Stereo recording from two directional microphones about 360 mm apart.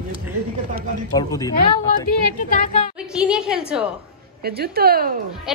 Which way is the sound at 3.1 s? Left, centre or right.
Centre.